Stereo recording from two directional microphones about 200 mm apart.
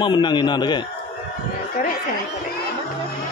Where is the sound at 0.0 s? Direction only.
25° left (ahead or behind).